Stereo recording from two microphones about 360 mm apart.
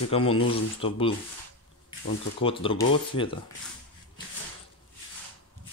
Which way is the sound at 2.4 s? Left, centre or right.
Centre.